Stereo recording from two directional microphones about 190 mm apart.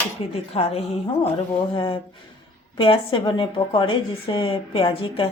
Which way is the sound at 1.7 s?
25° left (ahead or behind).